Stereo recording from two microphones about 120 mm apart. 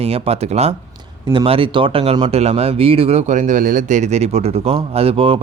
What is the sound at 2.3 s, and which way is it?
Speech, 60° right (ahead or behind).